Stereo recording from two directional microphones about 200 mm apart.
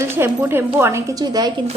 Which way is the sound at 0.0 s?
10° right (ahead or behind).